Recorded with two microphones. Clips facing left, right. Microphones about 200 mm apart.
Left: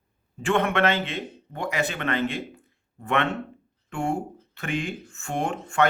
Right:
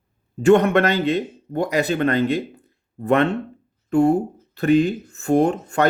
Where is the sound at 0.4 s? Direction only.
40° right (ahead or behind).